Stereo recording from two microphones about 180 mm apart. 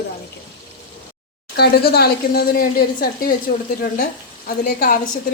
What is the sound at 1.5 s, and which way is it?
A woman's voice, 60° left (ahead or behind).